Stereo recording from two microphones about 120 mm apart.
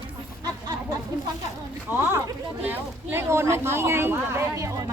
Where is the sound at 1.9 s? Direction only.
15° right (ahead or behind).